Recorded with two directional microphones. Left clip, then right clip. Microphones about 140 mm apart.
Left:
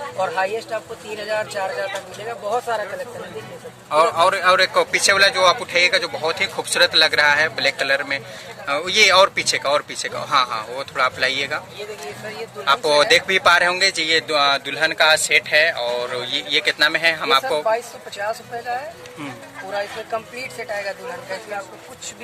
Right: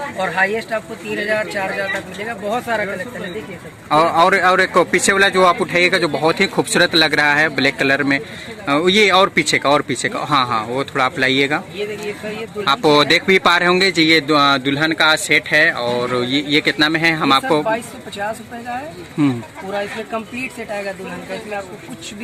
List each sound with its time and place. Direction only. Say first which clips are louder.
0.2 s speech: right 3 dB; 20° left (ahead or behind)
3.8 s speech: right 3 dB; 50° right (ahead or behind)
12.6 s speech: right 2 dB; 45° right (ahead or behind)